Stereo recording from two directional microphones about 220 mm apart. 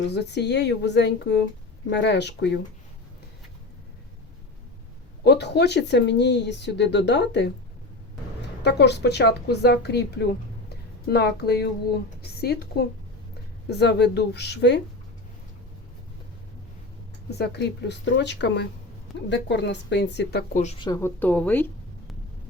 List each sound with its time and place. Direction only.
0.1 s speech: 50° left (ahead or behind)
5.2 s speech: 50° left (ahead or behind)
17.3 s speech: 50° left (ahead or behind)
20.6 s a woman's voice: 25° left (ahead or behind); by 22.1 s 10° left (ahead or behind)